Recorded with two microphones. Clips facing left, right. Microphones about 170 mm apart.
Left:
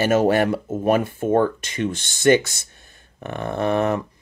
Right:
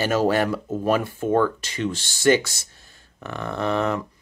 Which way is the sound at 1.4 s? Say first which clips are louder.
Left 2 dB; 50° left (ahead or behind).